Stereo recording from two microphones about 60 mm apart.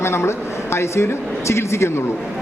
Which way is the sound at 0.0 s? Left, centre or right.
Left.